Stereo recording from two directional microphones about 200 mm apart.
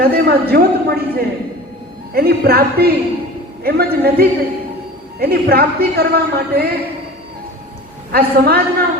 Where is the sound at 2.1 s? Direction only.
50° right (ahead or behind).